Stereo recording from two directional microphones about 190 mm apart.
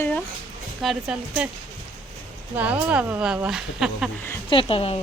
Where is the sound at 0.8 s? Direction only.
Centre (ahead or behind).